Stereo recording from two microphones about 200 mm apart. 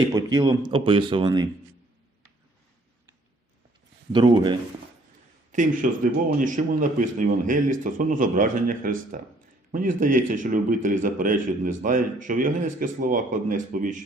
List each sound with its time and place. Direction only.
0.1 s speech: 20° right (ahead or behind)
4.1 s speech: 25° right (ahead or behind)
5.5 s a man's voice: 40° right (ahead or behind)